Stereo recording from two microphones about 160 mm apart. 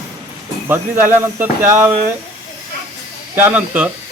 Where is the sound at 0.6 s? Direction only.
15° right (ahead or behind).